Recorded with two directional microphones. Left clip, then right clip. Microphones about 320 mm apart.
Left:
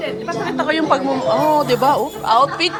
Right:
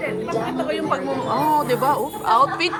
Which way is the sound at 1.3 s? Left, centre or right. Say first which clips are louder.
Left 3 dB; centre.